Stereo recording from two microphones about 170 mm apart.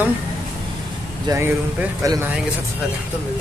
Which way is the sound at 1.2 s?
15° right (ahead or behind).